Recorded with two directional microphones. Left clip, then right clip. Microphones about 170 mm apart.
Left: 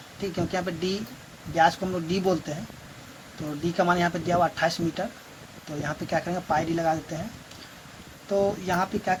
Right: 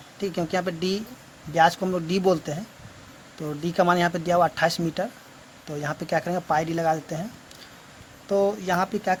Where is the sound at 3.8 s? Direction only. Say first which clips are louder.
Right 3 dB; 55° right (ahead or behind).